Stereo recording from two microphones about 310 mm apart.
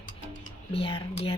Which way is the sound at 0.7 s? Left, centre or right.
Centre.